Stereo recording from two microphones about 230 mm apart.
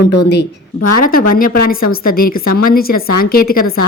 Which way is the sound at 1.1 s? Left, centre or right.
Left.